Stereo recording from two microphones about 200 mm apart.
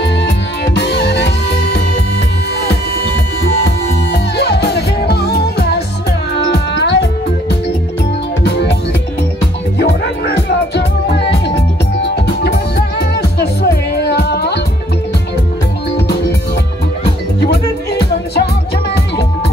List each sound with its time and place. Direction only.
0.7 s music: 60° left (ahead or behind)
3.4 s music: 55° left (ahead or behind)
9.8 s music: 60° left (ahead or behind)
13.4 s music: 55° left (ahead or behind)
17.5 s music: 55° left (ahead or behind)